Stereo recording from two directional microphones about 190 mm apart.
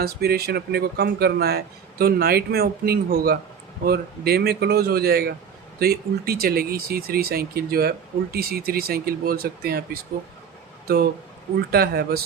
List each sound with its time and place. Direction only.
0.0 s speech: 55° right (ahead or behind)
11.7 s speech: 55° right (ahead or behind)